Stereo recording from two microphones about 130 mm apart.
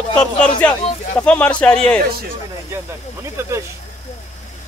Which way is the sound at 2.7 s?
20° right (ahead or behind).